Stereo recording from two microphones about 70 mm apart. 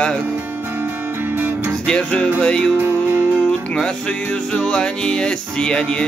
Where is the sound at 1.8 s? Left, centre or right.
Centre.